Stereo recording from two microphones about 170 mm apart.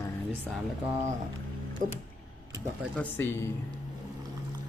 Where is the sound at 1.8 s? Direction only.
50° right (ahead or behind).